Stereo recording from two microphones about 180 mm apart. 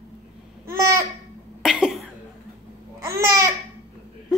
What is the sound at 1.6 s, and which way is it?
Speech, 5° right (ahead or behind).